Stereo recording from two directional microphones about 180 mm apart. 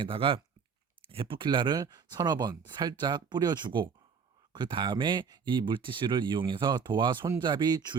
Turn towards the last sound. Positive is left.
turn(degrees=-25)  # may be behind; listen again after turning